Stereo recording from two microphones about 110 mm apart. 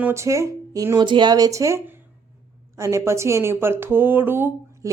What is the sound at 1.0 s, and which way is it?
Speech, 45° right (ahead or behind).